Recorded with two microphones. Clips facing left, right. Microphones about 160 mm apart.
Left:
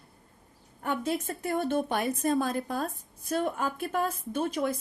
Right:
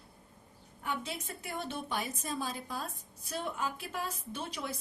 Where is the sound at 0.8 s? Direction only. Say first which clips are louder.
Left 8 dB; 50° left (ahead or behind).